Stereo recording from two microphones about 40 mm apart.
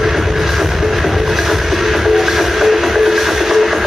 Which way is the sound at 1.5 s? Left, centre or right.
Centre.